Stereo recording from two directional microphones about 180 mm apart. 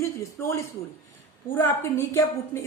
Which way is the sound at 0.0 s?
15° left (ahead or behind).